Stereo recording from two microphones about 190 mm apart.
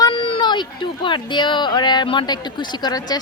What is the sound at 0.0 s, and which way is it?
Speech, 25° left (ahead or behind).